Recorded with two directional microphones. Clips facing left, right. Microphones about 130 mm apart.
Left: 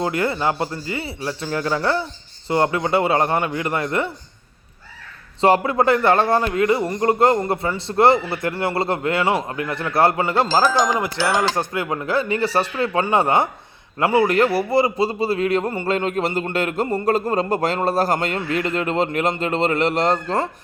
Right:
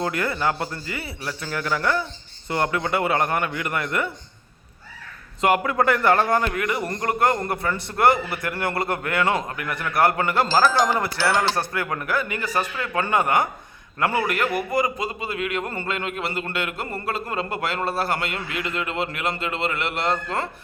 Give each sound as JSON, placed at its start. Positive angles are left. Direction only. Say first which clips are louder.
{"t": 0.0, "sound": "speech", "louder": "left 3 dB", "side_deg": 25}
{"t": 5.4, "sound": "speech", "louder": "left 4 dB", "side_deg": 30}
{"t": 10.4, "sound": "a man's voice", "louder": "left 1 dB", "side_deg": 15}